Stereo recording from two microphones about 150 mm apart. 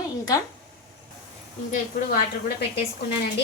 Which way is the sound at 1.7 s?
65° left (ahead or behind).